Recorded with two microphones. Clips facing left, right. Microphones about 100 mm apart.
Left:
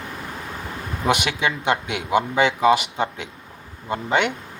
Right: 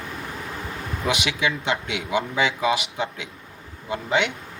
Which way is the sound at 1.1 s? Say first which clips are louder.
Left 3 dB; 50° left (ahead or behind).